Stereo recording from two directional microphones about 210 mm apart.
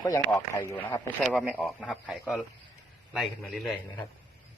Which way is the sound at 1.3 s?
5° right (ahead or behind).